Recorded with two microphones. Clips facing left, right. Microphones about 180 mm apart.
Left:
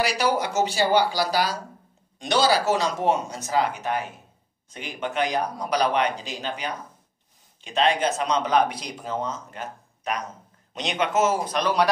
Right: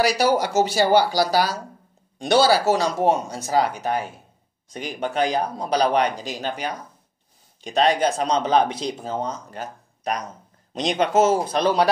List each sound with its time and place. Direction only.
0.0 s speech: 40° right (ahead or behind)
2.4 s speech: 35° right (ahead or behind)